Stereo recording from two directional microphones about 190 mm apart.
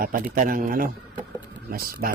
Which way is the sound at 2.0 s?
50° right (ahead or behind).